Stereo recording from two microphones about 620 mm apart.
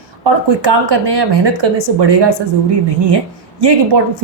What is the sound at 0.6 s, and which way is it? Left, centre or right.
A woman's voice, right.